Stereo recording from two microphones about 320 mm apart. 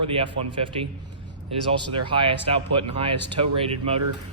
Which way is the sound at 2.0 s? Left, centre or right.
Centre.